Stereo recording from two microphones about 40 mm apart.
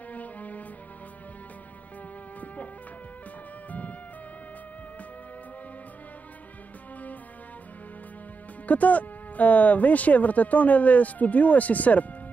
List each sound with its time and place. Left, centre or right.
0.1 s music: left
2.4 s insect: left
8.6 s speech: left